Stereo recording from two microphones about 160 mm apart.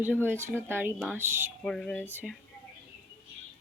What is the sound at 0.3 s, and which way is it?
A woman's voice, 15° right (ahead or behind).